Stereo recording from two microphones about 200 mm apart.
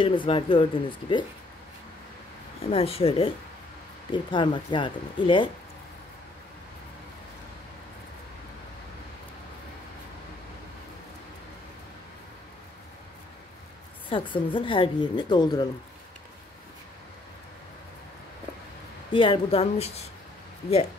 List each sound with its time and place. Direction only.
0.0 s speech: 25° left (ahead or behind)
2.6 s speech: 30° left (ahead or behind)
14.0 s speech: 25° left (ahead or behind)
19.1 s speech: 25° left (ahead or behind)